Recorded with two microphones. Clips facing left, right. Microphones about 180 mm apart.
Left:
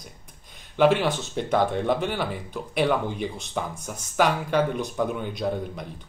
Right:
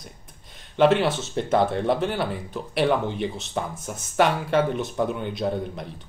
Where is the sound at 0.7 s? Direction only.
Centre (ahead or behind).